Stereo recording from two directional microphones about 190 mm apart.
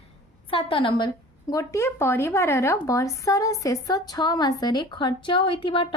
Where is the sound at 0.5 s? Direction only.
25° left (ahead or behind).